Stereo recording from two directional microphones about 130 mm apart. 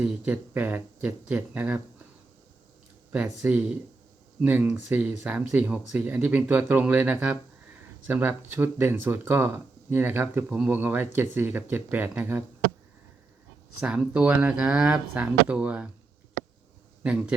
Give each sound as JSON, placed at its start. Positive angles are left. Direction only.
{"t": 0.0, "sound": "speech", "side_deg": -15}
{"t": 3.4, "sound": "speech", "side_deg": -10}
{"t": 13.7, "sound": "speech", "side_deg": -10}
{"t": 17.0, "sound": "a man's voice", "side_deg": -10}